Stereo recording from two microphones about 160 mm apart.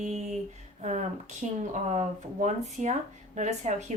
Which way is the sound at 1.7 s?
50° right (ahead or behind).